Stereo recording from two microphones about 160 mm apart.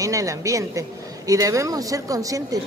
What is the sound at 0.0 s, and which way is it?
A man's voice, 20° right (ahead or behind).